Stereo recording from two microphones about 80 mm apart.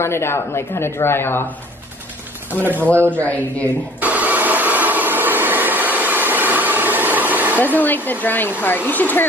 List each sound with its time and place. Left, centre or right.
0.0 s speech: left
2.5 s speech: right
3.1 s speech: centre
4.0 s a sound: right
7.6 s speech: left